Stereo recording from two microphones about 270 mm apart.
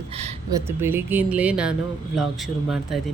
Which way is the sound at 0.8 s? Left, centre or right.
Centre.